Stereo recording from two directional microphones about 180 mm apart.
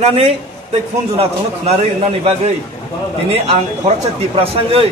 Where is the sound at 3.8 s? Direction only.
35° right (ahead or behind).